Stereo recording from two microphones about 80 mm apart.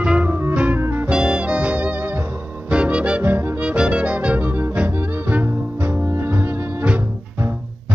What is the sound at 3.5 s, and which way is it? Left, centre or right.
Music, centre.